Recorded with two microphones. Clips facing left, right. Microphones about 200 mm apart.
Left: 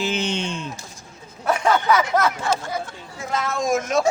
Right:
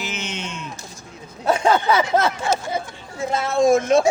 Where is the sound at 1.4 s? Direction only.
25° right (ahead or behind).